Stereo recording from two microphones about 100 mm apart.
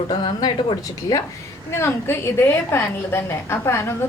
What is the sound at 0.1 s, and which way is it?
A woman's voice, 45° left (ahead or behind).